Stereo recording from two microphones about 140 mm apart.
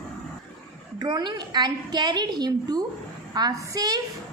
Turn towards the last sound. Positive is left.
turn(degrees=-25)  # may be behind; listen again after turning